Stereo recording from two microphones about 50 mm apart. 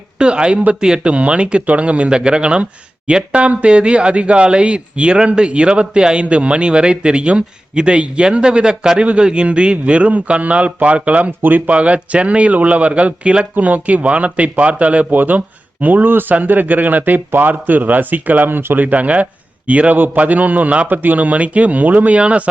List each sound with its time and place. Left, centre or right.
0.2 s speech: centre
11.3 s speech: right